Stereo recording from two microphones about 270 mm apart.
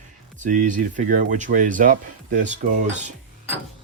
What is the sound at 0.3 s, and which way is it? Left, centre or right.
Speech, right.